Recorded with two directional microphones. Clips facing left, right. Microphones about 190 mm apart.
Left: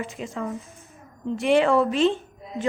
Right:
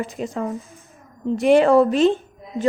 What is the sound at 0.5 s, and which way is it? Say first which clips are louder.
Speech: right 3 dB; centre (ahead or behind).